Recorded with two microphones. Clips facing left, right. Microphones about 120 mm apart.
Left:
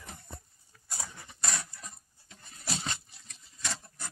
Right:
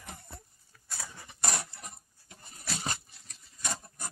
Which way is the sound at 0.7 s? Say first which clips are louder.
Even; 5° left (ahead or behind).